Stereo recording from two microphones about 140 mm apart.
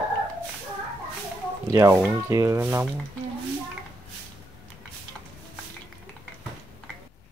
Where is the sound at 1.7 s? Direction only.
25° right (ahead or behind).